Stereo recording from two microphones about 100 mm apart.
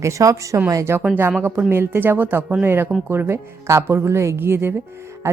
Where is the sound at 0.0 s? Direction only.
30° right (ahead or behind).